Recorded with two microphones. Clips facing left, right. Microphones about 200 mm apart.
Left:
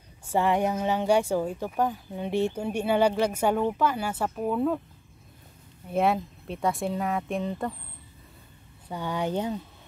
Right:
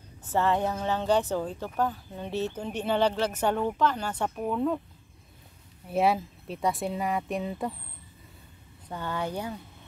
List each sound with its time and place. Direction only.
0.2 s speech: 10° left (ahead or behind)
5.9 s speech: centre (ahead or behind)
8.8 s speech: 15° left (ahead or behind)